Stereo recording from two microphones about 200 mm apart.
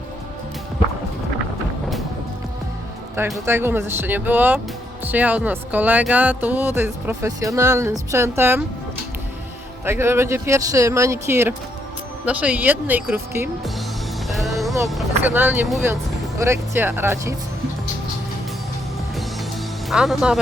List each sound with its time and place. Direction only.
3.2 s speech: 15° right (ahead or behind)
9.8 s speech: 10° right (ahead or behind)
14.3 s music: centre (ahead or behind)
14.8 s speech: 5° right (ahead or behind)
19.9 s speech: centre (ahead or behind)